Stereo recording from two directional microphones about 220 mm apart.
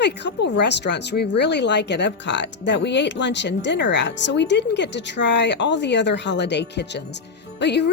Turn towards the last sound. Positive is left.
turn(degrees=50)  # may be behind; listen again after turning